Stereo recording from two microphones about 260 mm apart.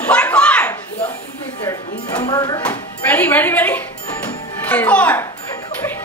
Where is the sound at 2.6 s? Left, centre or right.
Centre.